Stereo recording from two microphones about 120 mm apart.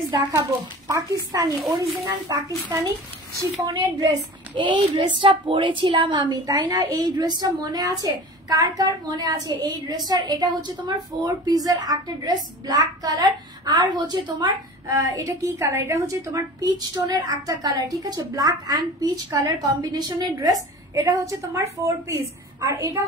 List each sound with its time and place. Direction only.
0.3 s a woman's voice: 25° right (ahead or behind)